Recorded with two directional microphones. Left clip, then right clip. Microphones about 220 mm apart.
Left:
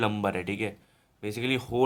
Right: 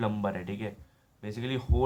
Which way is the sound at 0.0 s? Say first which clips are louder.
Left 4 dB; 50° left (ahead or behind).